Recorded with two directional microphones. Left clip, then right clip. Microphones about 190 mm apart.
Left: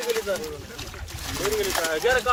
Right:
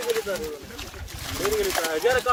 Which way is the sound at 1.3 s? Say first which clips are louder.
Right 1 dB; 20° right (ahead or behind).